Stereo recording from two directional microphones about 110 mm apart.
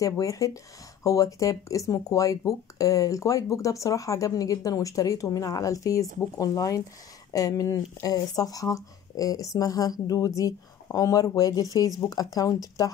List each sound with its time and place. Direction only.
0.0 s speech: 30° left (ahead or behind)